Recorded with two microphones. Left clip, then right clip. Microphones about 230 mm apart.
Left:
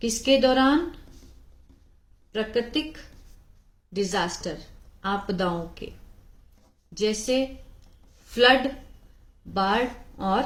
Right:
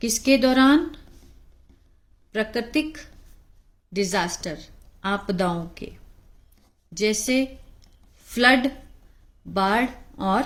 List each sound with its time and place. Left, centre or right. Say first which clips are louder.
0.0 s speech: right 1 dB; right
2.3 s speech: right 1 dB; right
3.9 s speech: right 2 dB; right
7.0 s speech: right 2 dB; right